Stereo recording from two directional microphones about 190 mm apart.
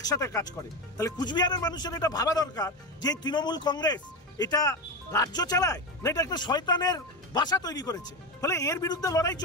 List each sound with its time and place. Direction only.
0.0 s speech: 20° left (ahead or behind)